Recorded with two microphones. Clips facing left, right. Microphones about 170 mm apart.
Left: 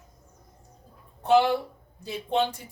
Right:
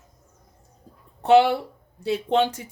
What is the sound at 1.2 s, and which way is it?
A woman's voice, 70° right (ahead or behind).